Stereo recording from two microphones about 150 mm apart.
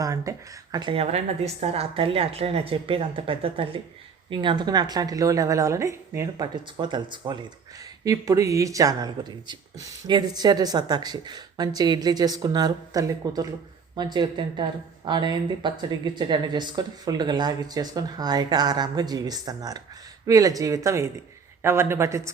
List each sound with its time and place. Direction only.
0.0 s speech: 20° right (ahead or behind)
1.6 s speech: 40° right (ahead or behind); by 6.5 s 20° right (ahead or behind)
6.7 s speech: 30° right (ahead or behind)